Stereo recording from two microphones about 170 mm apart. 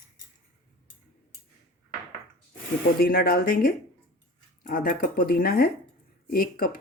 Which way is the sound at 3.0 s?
65° left (ahead or behind).